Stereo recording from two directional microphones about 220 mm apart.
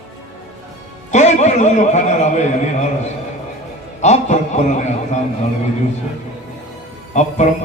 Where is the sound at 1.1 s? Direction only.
30° left (ahead or behind).